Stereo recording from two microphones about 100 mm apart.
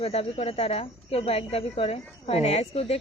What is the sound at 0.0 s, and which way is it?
Speech, 85° left.